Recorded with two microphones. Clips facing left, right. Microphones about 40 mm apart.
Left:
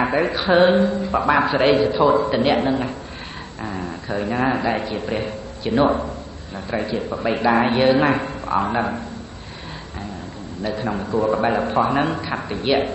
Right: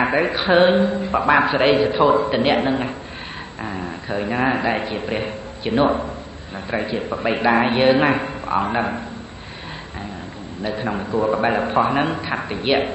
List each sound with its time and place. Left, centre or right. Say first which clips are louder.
0.0 s a man's voice: right 1 dB; right
10.6 s a man's voice: even; right